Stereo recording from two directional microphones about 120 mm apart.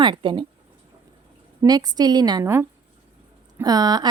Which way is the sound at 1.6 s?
35° right (ahead or behind).